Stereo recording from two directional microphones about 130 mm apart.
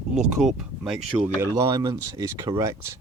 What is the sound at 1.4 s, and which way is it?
Speech, 25° right (ahead or behind).